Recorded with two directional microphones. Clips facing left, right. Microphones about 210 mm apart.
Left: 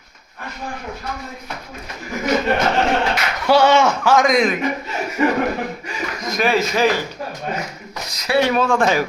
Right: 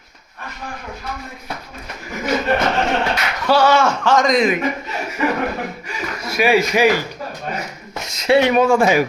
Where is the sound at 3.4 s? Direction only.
15° left (ahead or behind).